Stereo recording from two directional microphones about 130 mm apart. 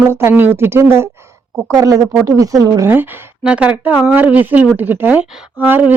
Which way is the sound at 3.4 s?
10° right (ahead or behind).